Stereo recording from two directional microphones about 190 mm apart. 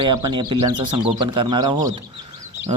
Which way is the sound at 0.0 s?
20° right (ahead or behind).